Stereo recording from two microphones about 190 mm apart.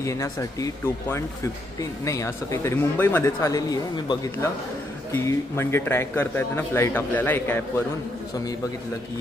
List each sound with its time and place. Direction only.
0.0 s speech: 15° left (ahead or behind)